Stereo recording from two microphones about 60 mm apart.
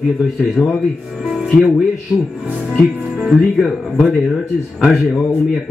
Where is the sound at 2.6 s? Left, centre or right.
Centre.